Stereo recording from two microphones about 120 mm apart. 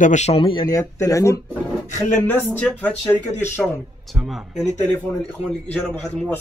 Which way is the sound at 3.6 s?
Centre (ahead or behind).